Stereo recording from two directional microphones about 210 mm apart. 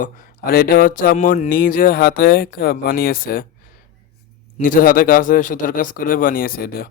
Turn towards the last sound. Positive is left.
turn(degrees=45)  # may be behind; listen again after turning